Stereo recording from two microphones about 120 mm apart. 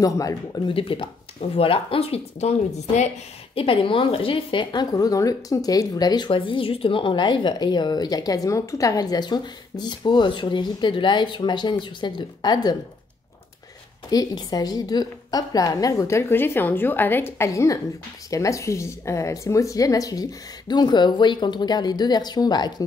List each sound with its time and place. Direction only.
0.0 s a woman's voice: 30° left (ahead or behind)
0.7 s speech: 50° left (ahead or behind); by 3.1 s 70° left (ahead or behind)
3.5 s a woman's voice: 50° left (ahead or behind)
14.1 s a woman's voice: 30° left (ahead or behind)